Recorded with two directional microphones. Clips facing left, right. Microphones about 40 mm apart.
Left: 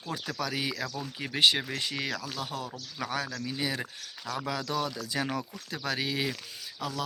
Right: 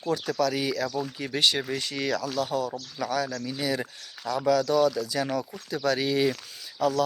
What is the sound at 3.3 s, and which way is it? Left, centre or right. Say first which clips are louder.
Speech: right 4 dB; centre.